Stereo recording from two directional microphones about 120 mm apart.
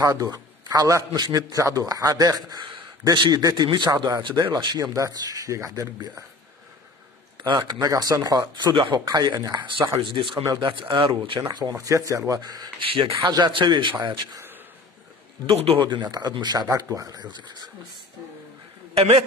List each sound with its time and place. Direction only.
0.0 s a man's voice: 30° right (ahead or behind)
7.5 s a man's voice: 30° right (ahead or behind)
12.8 s speech: 45° right (ahead or behind)
15.4 s a man's voice: 55° right (ahead or behind)
16.1 s a man's voice: 35° right (ahead or behind)
18.9 s speech: 55° right (ahead or behind)